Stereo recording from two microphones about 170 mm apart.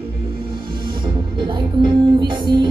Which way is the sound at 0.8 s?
30° right (ahead or behind).